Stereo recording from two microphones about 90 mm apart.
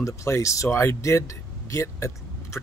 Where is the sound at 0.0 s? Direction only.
35° left (ahead or behind).